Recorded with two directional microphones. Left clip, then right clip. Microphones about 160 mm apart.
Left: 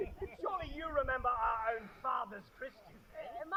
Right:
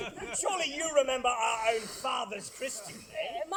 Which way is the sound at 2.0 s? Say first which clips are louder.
Right 2 dB; 15° right (ahead or behind).